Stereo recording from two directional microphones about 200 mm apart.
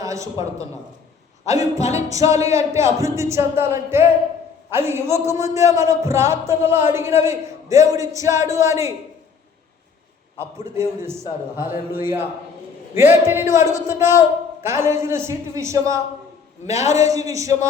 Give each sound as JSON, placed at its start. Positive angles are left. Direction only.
{"t": 0.0, "sound": "a sound", "side_deg": -15}
{"t": 1.8, "sound": "music", "side_deg": 35}
{"t": 2.0, "sound": "a man's voice", "side_deg": -15}
{"t": 10.6, "sound": "a man's voice", "side_deg": -10}